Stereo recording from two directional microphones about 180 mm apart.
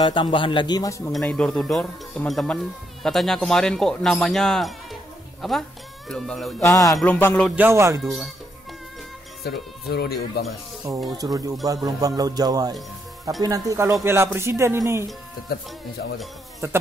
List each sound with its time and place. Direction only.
0.0 s a man's voice: 25° left (ahead or behind)
1.1 s speech: 5° left (ahead or behind)
6.6 s a man's voice: 20° left (ahead or behind)
7.0 s music: 10° left (ahead or behind)
7.5 s speech: 15° right (ahead or behind)
8.0 s speech: centre (ahead or behind)
9.4 s speech: 60° left (ahead or behind)
11.1 s music: 20° right (ahead or behind)
14.0 s speech: 15° right (ahead or behind)
15.5 s speech: 55° left (ahead or behind)